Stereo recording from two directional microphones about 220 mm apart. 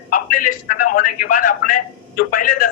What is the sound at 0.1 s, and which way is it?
A man's voice, 40° left (ahead or behind).